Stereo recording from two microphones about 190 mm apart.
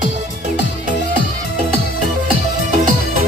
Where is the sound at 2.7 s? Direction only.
40° right (ahead or behind).